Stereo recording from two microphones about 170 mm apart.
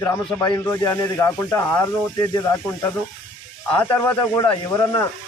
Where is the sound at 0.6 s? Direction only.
15° left (ahead or behind).